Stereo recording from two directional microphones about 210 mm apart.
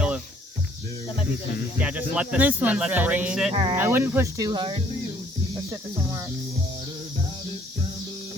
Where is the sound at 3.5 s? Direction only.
25° right (ahead or behind).